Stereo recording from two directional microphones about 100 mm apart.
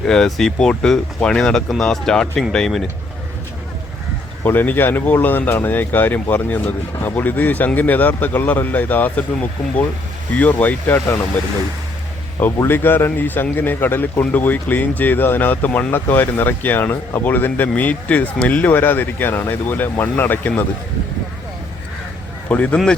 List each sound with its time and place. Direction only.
0.0 s speech: 5° left (ahead or behind)
4.4 s speech: 20° left (ahead or behind)
12.5 s speech: 20° left (ahead or behind)
22.4 s speech: 15° left (ahead or behind)